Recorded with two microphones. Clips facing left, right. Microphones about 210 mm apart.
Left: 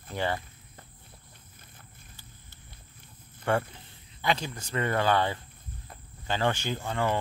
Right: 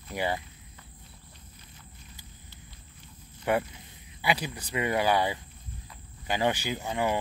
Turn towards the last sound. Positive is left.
turn(degrees=-10)  # may be behind; listen again after turning